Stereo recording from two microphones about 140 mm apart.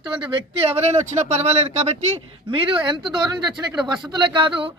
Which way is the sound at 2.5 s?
35° right (ahead or behind).